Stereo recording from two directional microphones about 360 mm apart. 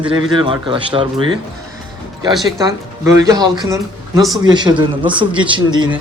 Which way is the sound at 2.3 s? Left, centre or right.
Centre.